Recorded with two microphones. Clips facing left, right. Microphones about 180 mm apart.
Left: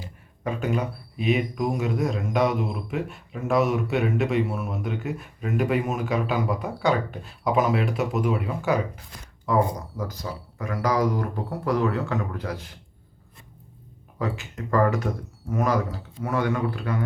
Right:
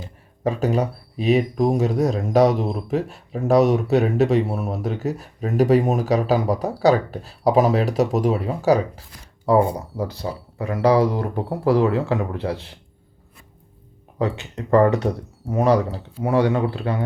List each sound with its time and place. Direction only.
0.4 s speech: 35° right (ahead or behind)
14.2 s speech: 35° right (ahead or behind)